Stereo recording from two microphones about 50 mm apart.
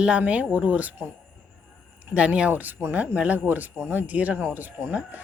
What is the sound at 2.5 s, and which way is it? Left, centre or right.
A woman's voice, right.